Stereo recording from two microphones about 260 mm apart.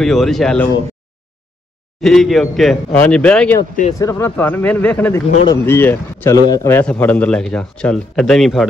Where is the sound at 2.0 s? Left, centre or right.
Centre.